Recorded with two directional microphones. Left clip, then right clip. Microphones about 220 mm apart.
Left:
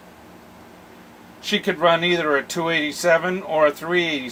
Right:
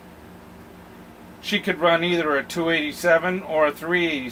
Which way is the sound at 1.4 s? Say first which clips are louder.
Left 2 dB; 30° left (ahead or behind).